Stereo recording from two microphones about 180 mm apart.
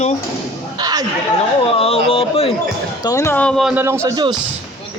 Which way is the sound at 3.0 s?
20° left (ahead or behind).